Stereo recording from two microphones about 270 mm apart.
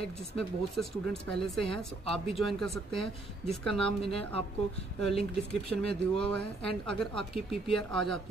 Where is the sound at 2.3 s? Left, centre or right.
Centre.